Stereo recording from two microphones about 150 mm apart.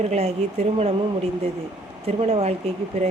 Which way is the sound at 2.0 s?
40° right (ahead or behind).